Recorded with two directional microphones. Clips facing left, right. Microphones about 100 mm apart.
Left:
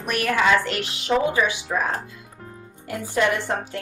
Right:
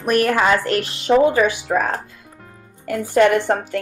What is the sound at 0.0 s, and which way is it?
A woman's voice, 40° right (ahead or behind).